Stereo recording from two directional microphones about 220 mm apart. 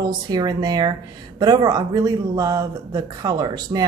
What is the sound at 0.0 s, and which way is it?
A woman's voice, 20° right (ahead or behind).